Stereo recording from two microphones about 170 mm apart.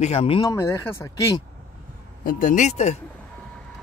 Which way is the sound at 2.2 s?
50° left (ahead or behind).